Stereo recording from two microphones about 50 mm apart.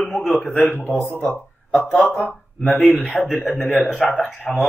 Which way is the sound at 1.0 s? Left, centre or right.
Left.